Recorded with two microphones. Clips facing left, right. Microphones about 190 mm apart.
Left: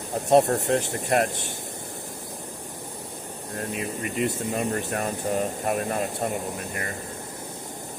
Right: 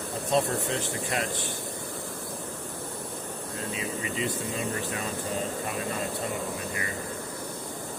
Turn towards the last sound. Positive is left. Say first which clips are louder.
# left 4 dB
turn(degrees=55)  # may be behind; listen again after turning